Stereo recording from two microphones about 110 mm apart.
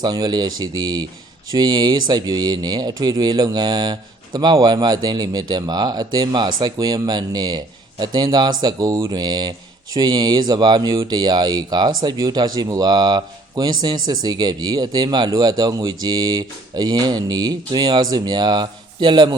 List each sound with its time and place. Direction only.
0.0 s speech: 40° right (ahead or behind)